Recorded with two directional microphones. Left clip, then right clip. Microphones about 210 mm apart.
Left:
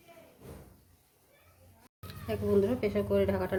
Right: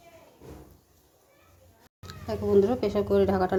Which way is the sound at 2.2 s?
15° right (ahead or behind).